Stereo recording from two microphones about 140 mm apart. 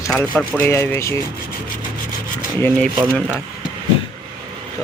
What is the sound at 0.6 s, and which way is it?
Speech, 15° left (ahead or behind).